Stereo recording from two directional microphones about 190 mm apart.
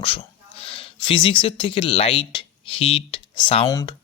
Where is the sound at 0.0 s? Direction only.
30° left (ahead or behind).